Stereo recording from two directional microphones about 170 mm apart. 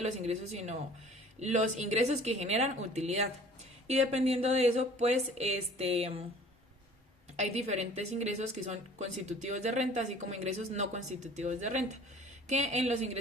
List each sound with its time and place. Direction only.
0.0 s a woman's voice: 40° right (ahead or behind)
7.3 s a woman's voice: 40° right (ahead or behind)